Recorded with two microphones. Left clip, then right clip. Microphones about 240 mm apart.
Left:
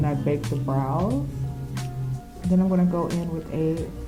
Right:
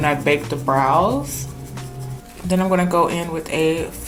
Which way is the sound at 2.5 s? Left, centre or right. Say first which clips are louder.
Right 7 dB; centre.